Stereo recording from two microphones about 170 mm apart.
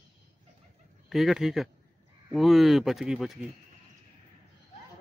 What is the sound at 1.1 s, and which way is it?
Speech, centre (ahead or behind).